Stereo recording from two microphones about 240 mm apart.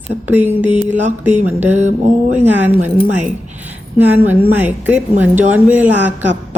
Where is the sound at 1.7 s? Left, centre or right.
Right.